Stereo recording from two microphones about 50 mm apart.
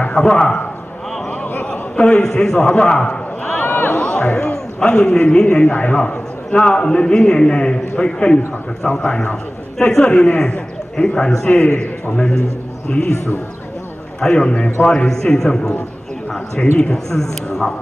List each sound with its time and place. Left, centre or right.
0.2 s a man's voice: centre
1.1 s a sound: centre
2.2 s a man's voice: centre
3.4 s a sound: left
4.0 s a man's voice: left
5.7 s a man's voice: left
11.4 s a man's voice: left
14.2 s a man's voice: centre